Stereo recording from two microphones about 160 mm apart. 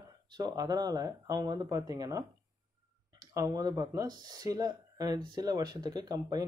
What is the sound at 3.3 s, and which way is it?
Speech, 20° right (ahead or behind).